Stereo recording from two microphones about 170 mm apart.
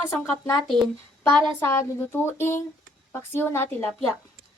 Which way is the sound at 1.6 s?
15° left (ahead or behind).